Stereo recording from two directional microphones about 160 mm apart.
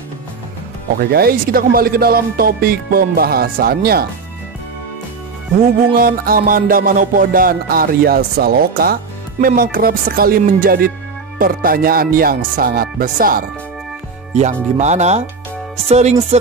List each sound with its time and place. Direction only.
0.9 s speech: 70° right (ahead or behind)
5.9 s music: 65° right (ahead or behind)
9.6 s speech: 65° right (ahead or behind)
11.3 s music: 65° right (ahead or behind)
14.3 s speech: 45° right (ahead or behind)